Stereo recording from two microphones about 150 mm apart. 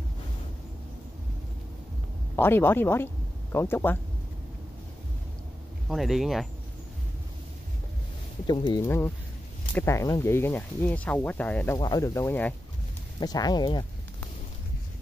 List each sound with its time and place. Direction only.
2.3 s speech: 15° left (ahead or behind)
5.9 s speech: centre (ahead or behind)
8.6 s speech: 20° left (ahead or behind)
11.7 s speech: 25° left (ahead or behind)
13.2 s speech: 25° left (ahead or behind)